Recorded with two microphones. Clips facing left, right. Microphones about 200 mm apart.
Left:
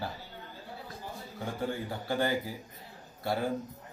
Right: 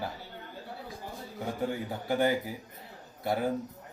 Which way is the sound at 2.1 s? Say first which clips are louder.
Right 3 dB; 20° right (ahead or behind).